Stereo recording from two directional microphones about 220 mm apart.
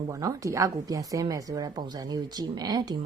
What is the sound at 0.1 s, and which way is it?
Speech, 15° right (ahead or behind).